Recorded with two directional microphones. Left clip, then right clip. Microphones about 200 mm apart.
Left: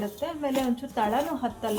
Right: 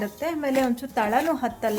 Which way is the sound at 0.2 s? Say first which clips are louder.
Right 5 dB; 45° right (ahead or behind).